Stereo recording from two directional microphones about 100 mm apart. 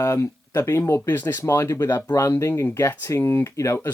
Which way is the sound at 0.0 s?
30° left (ahead or behind).